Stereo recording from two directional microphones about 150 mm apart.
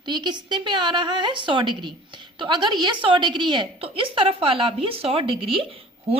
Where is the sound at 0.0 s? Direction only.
30° right (ahead or behind).